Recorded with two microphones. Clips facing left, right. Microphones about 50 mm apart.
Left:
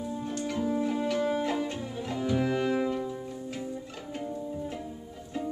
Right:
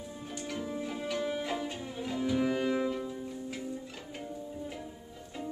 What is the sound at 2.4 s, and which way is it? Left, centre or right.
Music, centre.